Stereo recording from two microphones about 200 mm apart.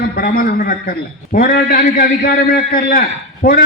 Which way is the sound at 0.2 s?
45° left (ahead or behind).